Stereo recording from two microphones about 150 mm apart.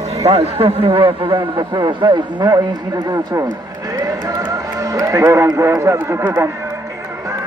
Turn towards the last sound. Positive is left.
turn(degrees=-20)  # may be behind; listen again after turning